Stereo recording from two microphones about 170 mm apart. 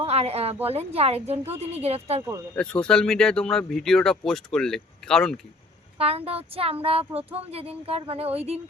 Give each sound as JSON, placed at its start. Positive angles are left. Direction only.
{"t": 0.0, "sound": "a woman's voice", "side_deg": -35}
{"t": 2.6, "sound": "speech", "side_deg": 5}
{"t": 6.0, "sound": "a woman's voice", "side_deg": -35}